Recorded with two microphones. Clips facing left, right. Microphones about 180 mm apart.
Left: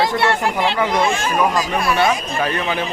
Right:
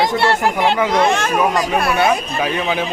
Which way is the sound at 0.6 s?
60° right (ahead or behind).